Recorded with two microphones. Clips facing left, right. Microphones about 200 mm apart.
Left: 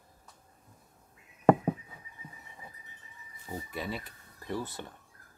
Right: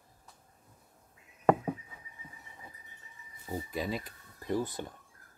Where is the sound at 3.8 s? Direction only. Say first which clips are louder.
Right 2 dB; 15° right (ahead or behind).